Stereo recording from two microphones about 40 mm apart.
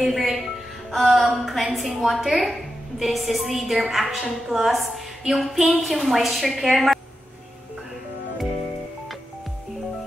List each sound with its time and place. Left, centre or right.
0.0 s speech: centre
0.9 s a sound: centre
1.4 s a woman's voice: centre